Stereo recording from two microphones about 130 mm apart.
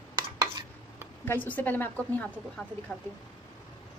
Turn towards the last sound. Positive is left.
turn(degrees=15)  # may be behind; listen again after turning